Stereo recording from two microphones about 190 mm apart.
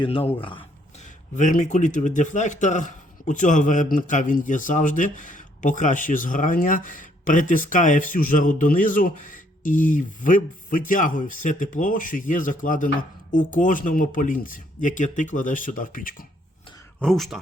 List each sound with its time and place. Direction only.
0.0 s speech: 30° left (ahead or behind); by 16.2 s 45° left (ahead or behind)
17.0 s speech: centre (ahead or behind)